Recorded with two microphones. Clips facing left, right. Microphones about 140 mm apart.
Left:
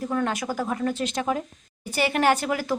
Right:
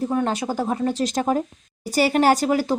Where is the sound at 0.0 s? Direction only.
25° right (ahead or behind).